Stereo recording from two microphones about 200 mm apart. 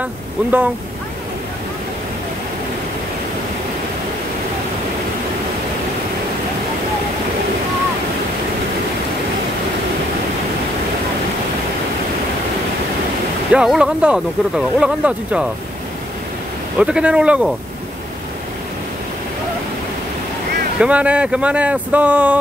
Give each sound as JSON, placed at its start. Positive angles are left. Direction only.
{"t": 0.0, "sound": "speech", "side_deg": -10}
{"t": 13.5, "sound": "speech", "side_deg": -5}
{"t": 16.7, "sound": "speech", "side_deg": -5}
{"t": 20.8, "sound": "speech", "side_deg": -5}